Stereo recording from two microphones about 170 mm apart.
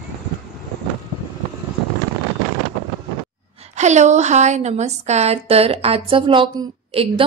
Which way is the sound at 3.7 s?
45° right (ahead or behind).